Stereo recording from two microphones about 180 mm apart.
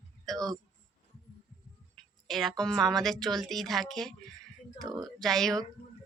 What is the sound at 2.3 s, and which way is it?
A woman's voice, centre (ahead or behind).